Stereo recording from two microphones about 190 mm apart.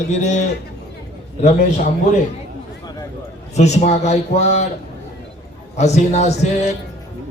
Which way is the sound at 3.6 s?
35° left (ahead or behind).